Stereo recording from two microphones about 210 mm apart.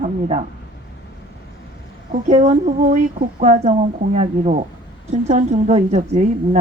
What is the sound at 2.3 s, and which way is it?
A woman's voice, 40° right (ahead or behind).